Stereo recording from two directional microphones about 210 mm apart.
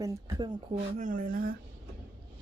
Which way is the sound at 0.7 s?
40° right (ahead or behind).